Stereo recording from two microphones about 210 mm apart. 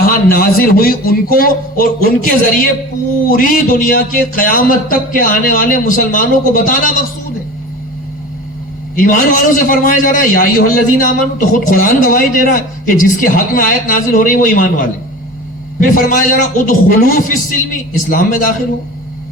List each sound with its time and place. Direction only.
0.0 s a man's voice: 45° left (ahead or behind)
9.0 s a man's voice: 40° left (ahead or behind)